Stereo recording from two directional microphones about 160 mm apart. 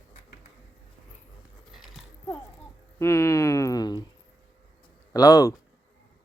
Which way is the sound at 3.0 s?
15° left (ahead or behind).